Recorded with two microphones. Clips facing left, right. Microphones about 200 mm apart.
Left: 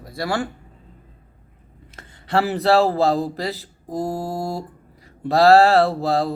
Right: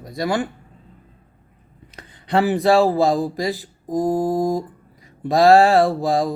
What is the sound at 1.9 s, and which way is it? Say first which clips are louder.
A man's voice: right 1 dB; 15° right (ahead or behind).